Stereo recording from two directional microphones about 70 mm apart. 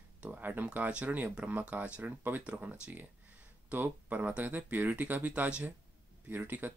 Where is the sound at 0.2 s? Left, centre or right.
Right.